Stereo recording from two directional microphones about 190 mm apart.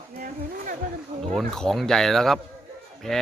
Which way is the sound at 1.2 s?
Centre (ahead or behind).